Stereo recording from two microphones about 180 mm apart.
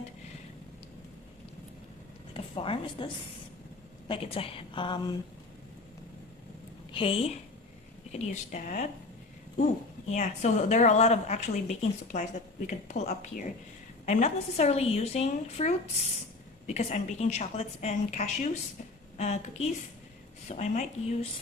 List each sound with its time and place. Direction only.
2.3 s a woman's voice: 30° left (ahead or behind)
4.1 s a woman's voice: 30° left (ahead or behind)
6.9 s a woman's voice: 30° left (ahead or behind)
8.3 s speech: 45° left (ahead or behind)
10.1 s a woman's voice: 40° left (ahead or behind)